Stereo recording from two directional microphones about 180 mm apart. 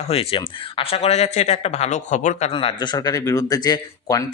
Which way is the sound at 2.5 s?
25° left (ahead or behind).